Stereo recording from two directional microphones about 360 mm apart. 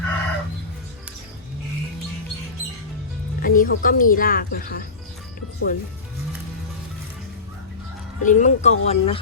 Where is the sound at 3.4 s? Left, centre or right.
Left.